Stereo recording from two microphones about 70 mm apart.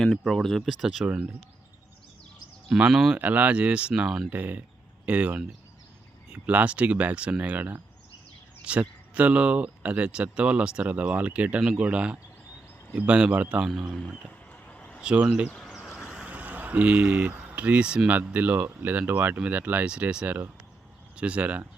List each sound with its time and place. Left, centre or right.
0.0 s speech: centre
1.0 s speech: centre
2.6 s speech: centre
3.2 s speech: right
4.3 s speech: right
5.0 s speech: centre
13.7 s speech: centre
14.5 s a sound: centre
15.0 s speech: centre
15.7 s vehicle: centre
16.2 s speech: right